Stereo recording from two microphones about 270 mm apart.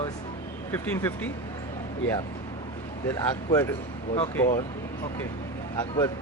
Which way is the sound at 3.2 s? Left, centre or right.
Centre.